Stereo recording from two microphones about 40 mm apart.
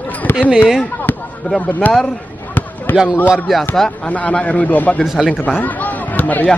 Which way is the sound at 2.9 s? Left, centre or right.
Left.